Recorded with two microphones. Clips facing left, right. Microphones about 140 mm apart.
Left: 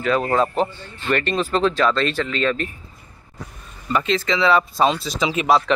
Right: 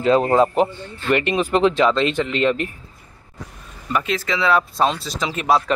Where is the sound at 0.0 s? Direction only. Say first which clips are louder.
Right 4 dB; 25° right (ahead or behind).